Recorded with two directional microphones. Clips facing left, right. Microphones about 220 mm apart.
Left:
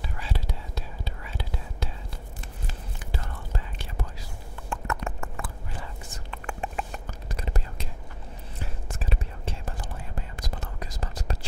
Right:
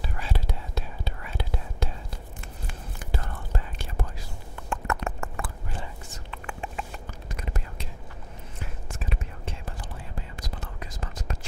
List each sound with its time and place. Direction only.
0.2 s whispering: 55° right (ahead or behind)
3.0 s whispering: 50° right (ahead or behind)
4.6 s horse: 65° right (ahead or behind)
6.3 s a sound: 45° left (ahead or behind)
7.3 s whispering: 35° left (ahead or behind)
8.8 s whispering: 35° left (ahead or behind)
10.6 s whispering: 40° left (ahead or behind)